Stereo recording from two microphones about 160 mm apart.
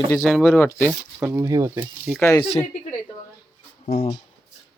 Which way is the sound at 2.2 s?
15° left (ahead or behind).